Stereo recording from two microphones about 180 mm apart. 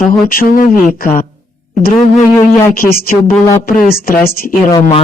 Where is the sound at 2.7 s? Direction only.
55° left (ahead or behind).